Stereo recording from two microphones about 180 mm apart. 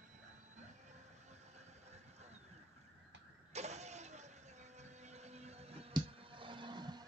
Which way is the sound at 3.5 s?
40° right (ahead or behind).